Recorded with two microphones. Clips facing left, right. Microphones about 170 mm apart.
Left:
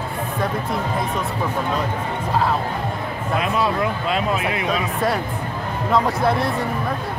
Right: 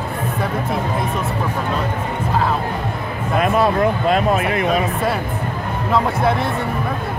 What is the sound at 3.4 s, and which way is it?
Speech, 50° right (ahead or behind).